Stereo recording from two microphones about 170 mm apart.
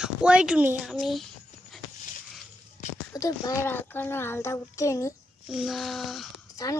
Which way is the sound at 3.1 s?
20° left (ahead or behind).